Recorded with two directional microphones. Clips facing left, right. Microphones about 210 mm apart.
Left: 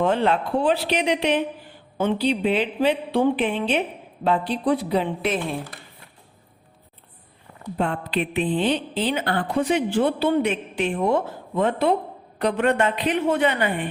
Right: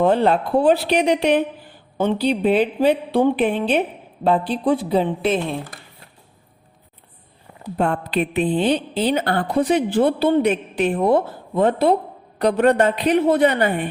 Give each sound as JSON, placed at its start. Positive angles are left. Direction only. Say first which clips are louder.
{"t": 0.0, "sound": "a woman's voice", "louder": "right 4 dB", "side_deg": -35}
{"t": 7.8, "sound": "a woman's voice", "louder": "right 4 dB", "side_deg": -45}